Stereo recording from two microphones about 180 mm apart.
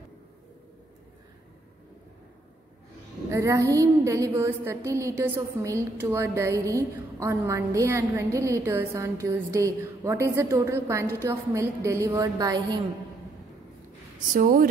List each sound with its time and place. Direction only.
3.3 s a woman's voice: 15° right (ahead or behind)
14.3 s speech: 50° right (ahead or behind)